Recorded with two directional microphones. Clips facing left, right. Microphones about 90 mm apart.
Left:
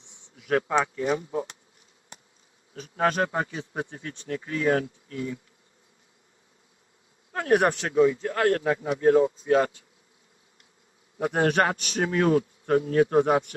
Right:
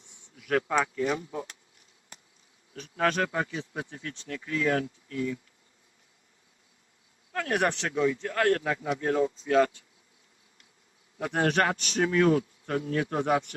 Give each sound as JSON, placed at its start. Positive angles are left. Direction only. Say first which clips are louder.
{"t": 0.5, "sound": "speech", "louder": "left 2 dB", "side_deg": 20}
{"t": 3.2, "sound": "speech", "louder": "left 2 dB", "side_deg": 30}
{"t": 7.3, "sound": "a man's voice", "louder": "left 6 dB", "side_deg": 20}
{"t": 7.9, "sound": "speech", "louder": "left 6 dB", "side_deg": 25}
{"t": 11.3, "sound": "a man's voice", "louder": "left 3 dB", "side_deg": 15}
{"t": 12.1, "sound": "speech", "louder": "left 2 dB", "side_deg": 25}